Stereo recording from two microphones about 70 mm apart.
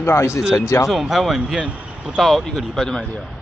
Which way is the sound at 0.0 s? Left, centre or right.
Left.